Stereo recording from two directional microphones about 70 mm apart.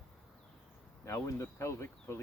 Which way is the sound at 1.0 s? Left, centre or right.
Left.